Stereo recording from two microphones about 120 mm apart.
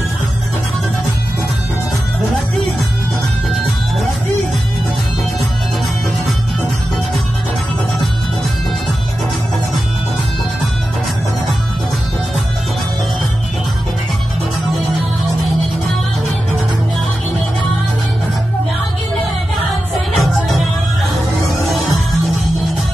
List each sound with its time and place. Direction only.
20.2 s music: centre (ahead or behind)